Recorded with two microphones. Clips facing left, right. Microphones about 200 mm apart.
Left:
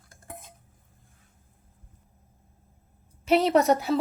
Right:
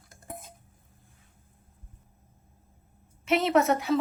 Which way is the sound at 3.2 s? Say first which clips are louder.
Left 3 dB; 35° left (ahead or behind).